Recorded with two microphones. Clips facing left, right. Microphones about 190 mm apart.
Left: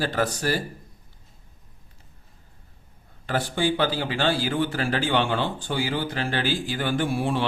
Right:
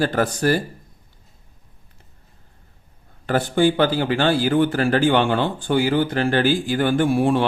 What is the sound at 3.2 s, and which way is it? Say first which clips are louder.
Speech: right 7 dB; 50° right (ahead or behind).